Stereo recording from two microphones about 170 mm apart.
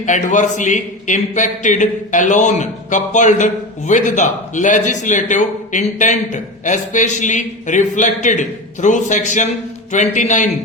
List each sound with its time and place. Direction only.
0.0 s speech: 45° left (ahead or behind)